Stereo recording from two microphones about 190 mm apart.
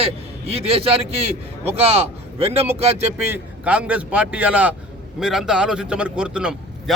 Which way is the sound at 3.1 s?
5° right (ahead or behind).